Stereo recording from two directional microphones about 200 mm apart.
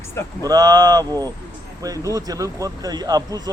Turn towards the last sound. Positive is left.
turn(degrees=-20)  # may be behind; listen again after turning